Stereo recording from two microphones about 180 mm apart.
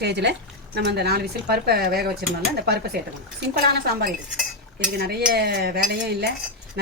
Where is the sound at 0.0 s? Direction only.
70° right (ahead or behind).